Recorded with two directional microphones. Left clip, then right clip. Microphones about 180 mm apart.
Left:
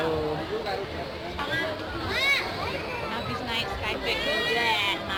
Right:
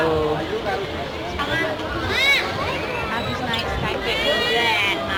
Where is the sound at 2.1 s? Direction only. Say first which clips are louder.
Right 6 dB; 60° left (ahead or behind).